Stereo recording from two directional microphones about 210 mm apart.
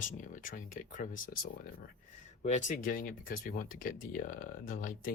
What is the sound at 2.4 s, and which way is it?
Speech, 35° left (ahead or behind).